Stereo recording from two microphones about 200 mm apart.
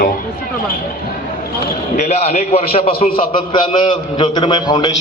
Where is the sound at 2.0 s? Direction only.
30° left (ahead or behind).